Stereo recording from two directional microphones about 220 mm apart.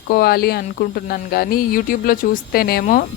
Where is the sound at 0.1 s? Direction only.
45° left (ahead or behind).